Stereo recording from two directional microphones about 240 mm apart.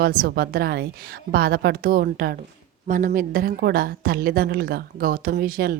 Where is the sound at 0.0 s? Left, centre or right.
Right.